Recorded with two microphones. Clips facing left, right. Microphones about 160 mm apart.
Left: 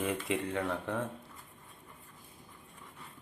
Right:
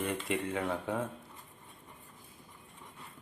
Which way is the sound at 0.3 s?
Centre (ahead or behind).